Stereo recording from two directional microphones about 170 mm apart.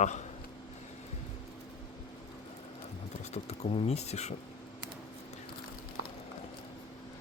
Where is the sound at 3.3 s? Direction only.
40° left (ahead or behind).